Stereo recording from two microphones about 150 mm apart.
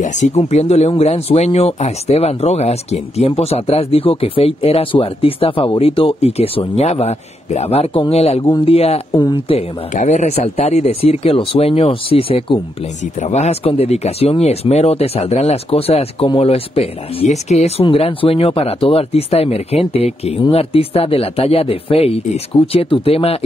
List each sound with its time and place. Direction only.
0.0 s speech: 55° left (ahead or behind)
9.1 s speech: 30° left (ahead or behind)
9.6 s speech: 50° left (ahead or behind)
13.0 s speech: 50° left (ahead or behind)